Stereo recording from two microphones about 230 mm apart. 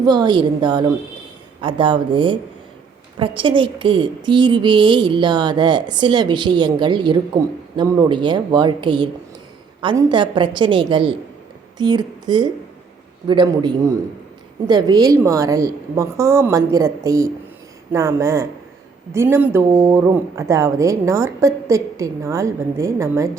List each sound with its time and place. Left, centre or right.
0.0 s a woman's voice: centre